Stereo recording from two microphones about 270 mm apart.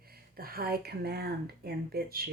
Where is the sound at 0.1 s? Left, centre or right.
Right.